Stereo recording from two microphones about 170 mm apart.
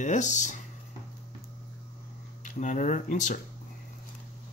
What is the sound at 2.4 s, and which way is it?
Speech, 45° left (ahead or behind).